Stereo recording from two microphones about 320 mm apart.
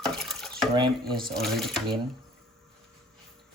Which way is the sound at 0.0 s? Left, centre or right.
Centre.